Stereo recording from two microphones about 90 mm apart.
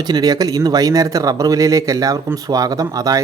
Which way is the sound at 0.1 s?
45° right (ahead or behind).